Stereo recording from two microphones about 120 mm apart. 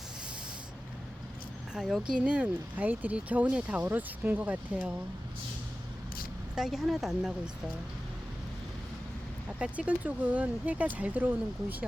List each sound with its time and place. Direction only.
1.7 s speech: 5° right (ahead or behind)
6.6 s speech: centre (ahead or behind)
9.6 s speech: 10° right (ahead or behind)